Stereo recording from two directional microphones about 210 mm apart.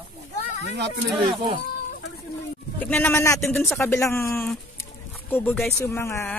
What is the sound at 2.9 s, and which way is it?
Speech, 10° left (ahead or behind).